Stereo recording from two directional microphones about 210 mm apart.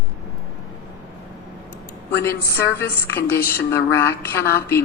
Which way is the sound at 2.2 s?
10° left (ahead or behind).